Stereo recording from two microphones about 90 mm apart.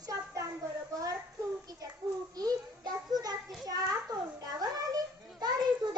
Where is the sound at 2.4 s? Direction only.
45° right (ahead or behind).